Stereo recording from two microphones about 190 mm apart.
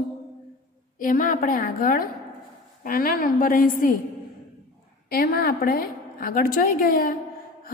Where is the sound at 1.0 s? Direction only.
45° left (ahead or behind).